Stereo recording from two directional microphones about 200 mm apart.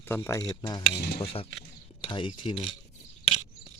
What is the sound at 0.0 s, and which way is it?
Speech, 10° left (ahead or behind).